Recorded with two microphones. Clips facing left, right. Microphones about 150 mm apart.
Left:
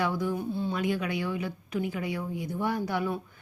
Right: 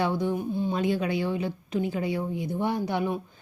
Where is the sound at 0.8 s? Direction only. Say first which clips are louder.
Right 5 dB; 30° right (ahead or behind).